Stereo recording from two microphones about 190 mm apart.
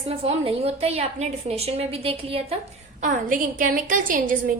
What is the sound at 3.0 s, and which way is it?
A woman's voice, 45° right (ahead or behind).